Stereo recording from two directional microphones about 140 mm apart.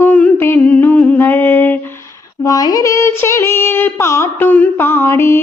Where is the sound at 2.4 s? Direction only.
25° left (ahead or behind).